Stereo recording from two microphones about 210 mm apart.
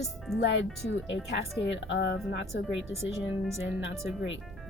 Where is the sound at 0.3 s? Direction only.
60° left (ahead or behind).